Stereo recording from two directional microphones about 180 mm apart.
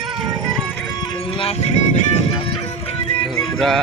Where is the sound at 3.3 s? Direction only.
Centre (ahead or behind).